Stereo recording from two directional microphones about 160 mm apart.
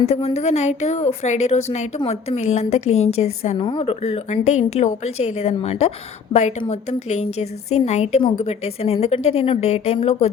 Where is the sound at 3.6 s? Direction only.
30° left (ahead or behind).